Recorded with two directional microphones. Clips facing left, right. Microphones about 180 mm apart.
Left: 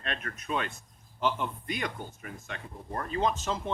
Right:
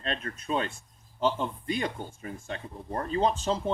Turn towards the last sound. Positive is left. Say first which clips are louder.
# right 3 dB
turn(degrees=-30)  # may be behind; listen again after turning